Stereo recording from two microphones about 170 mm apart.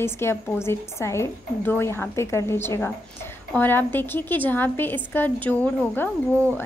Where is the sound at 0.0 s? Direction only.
15° left (ahead or behind).